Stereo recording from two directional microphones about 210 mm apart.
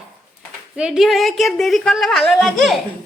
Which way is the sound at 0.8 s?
5° right (ahead or behind).